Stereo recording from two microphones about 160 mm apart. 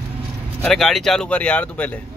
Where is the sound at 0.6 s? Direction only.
Centre (ahead or behind).